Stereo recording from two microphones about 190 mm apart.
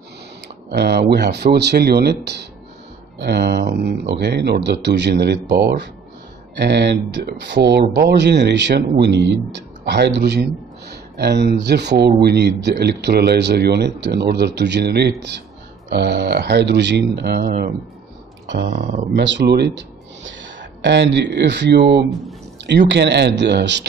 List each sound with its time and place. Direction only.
0.7 s speech: 60° right (ahead or behind)
18.5 s speech: 60° right (ahead or behind)
20.2 s speech: 75° right (ahead or behind)